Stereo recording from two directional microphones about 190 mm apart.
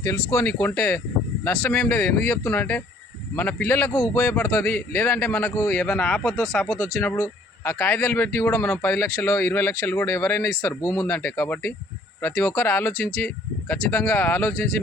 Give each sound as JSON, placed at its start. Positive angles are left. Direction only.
{"t": 0.3, "sound": "speech", "side_deg": 10}